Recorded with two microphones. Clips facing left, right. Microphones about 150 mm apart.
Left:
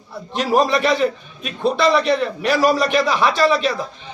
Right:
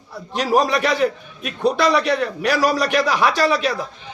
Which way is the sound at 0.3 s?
Centre (ahead or behind).